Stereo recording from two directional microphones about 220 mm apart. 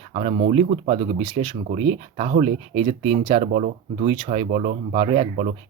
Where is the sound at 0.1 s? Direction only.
30° right (ahead or behind).